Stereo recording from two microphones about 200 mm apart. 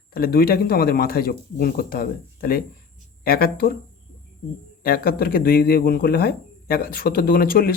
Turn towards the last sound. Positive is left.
turn(degrees=50)  # may be behind; listen again after turning